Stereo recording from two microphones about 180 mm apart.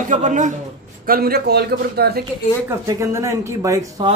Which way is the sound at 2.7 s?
15° right (ahead or behind).